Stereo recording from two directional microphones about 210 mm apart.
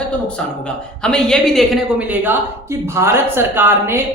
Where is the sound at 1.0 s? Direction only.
5° left (ahead or behind).